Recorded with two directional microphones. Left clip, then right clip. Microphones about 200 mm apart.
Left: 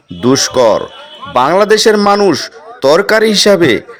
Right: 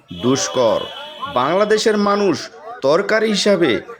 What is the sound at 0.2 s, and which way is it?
A man's voice, 40° left (ahead or behind).